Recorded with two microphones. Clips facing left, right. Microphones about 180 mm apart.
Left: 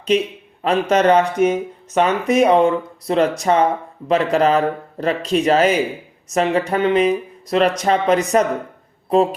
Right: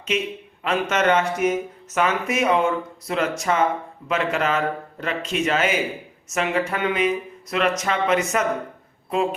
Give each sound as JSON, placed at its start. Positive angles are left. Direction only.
{"t": 0.1, "sound": "speech", "side_deg": 35}